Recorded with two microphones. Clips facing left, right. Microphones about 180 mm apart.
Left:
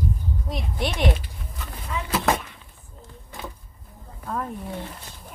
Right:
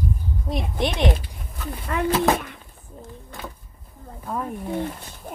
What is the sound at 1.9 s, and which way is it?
Speech, 65° right (ahead or behind).